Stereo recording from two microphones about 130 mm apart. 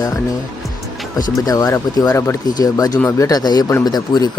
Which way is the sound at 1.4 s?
30° left (ahead or behind).